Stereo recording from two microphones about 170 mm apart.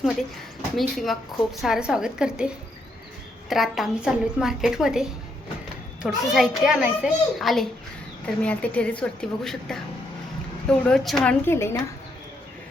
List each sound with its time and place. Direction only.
0.8 s a child's voice: centre (ahead or behind)